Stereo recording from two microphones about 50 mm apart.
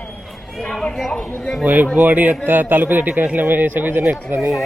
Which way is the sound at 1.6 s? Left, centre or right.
Right.